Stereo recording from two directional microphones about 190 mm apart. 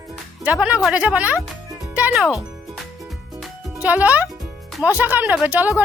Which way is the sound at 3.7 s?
5° right (ahead or behind).